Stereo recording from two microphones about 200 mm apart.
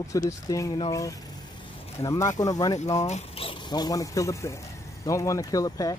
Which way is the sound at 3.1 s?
30° left (ahead or behind).